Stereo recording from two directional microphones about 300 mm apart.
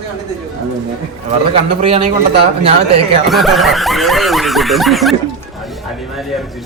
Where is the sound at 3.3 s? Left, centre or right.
Centre.